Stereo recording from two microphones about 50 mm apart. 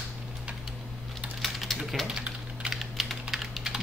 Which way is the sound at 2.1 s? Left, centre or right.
Centre.